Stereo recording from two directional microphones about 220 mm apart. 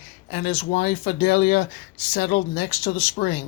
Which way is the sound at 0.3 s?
40° left (ahead or behind).